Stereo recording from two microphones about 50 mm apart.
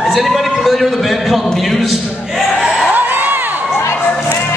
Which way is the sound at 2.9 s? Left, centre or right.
Right.